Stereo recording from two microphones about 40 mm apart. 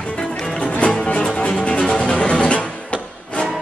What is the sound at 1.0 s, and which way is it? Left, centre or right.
Music, left.